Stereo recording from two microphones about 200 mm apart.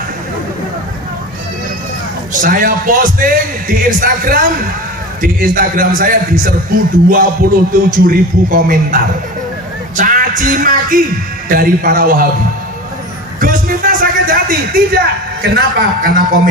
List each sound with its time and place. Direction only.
2.4 s a man's voice: 45° right (ahead or behind)
9.9 s a man's voice: 40° right (ahead or behind)
13.4 s a man's voice: 45° right (ahead or behind)